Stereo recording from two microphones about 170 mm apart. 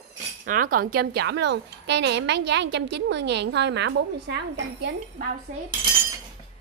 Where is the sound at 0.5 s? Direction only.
55° right (ahead or behind); by 4.4 s 90° right.